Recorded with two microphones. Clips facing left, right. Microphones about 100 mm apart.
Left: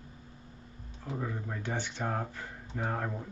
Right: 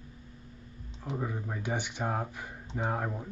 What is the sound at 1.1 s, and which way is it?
Speech, 15° right (ahead or behind).